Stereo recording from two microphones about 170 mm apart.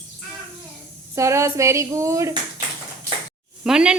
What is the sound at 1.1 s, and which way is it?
Speech, 15° right (ahead or behind).